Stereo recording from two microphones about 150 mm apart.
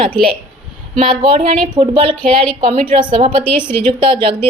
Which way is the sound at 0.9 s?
40° right (ahead or behind).